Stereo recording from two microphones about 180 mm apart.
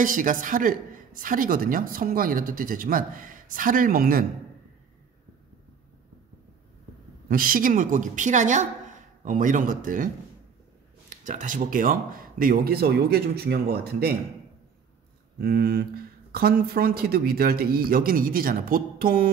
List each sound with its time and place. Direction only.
0.0 s a woman's voice: 50° right (ahead or behind)
7.2 s a woman's voice: 50° right (ahead or behind)
11.1 s a woman's voice: 45° right (ahead or behind)
15.4 s speech: 60° right (ahead or behind)